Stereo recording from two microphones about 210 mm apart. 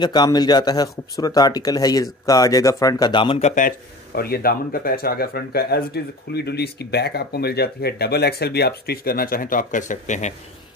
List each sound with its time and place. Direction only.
0.0 s speech: 20° left (ahead or behind); by 10.3 s 35° left (ahead or behind)